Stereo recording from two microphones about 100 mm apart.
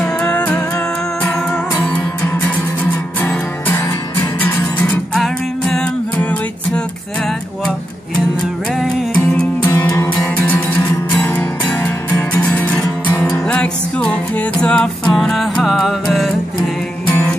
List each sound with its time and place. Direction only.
0.0 s music: 15° left (ahead or behind)
1.8 s music: 20° left (ahead or behind)
5.1 s music: 5° left (ahead or behind)
9.1 s music: 10° left (ahead or behind)
9.7 s music: 30° left (ahead or behind)
13.5 s music: 10° left (ahead or behind)
17.1 s music: 15° left (ahead or behind)